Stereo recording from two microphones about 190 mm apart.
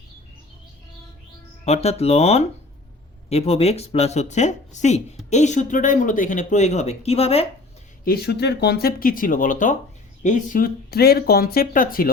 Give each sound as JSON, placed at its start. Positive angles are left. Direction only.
{"t": 1.6, "sound": "speech", "side_deg": 35}
{"t": 8.0, "sound": "speech", "side_deg": 55}